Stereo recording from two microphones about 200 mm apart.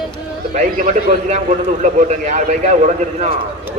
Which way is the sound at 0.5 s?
35° right (ahead or behind).